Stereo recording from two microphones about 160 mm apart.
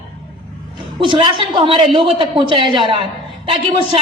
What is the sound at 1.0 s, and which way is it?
A woman's voice, 35° right (ahead or behind).